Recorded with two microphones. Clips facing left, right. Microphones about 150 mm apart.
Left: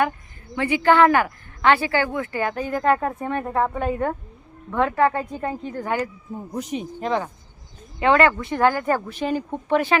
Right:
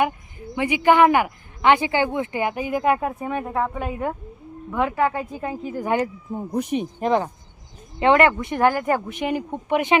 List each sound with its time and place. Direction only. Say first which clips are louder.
0.5 s speech: even; 15° right (ahead or behind)
5.9 s speech: right 4 dB; 30° right (ahead or behind)